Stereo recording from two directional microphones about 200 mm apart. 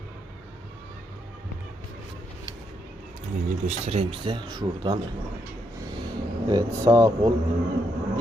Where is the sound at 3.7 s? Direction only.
35° right (ahead or behind).